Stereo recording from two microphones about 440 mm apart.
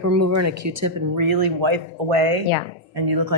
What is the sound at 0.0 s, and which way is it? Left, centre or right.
Speech, right.